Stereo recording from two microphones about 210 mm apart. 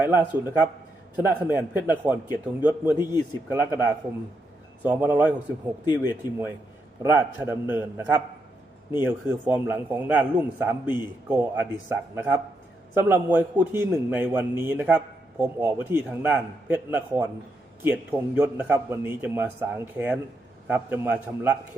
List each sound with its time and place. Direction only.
0.0 s a man's voice: 10° right (ahead or behind)
5.8 s speech: 20° left (ahead or behind)
7.0 s a man's voice: 10° right (ahead or behind)